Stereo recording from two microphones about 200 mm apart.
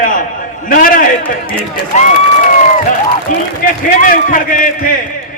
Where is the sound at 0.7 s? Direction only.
45° left (ahead or behind).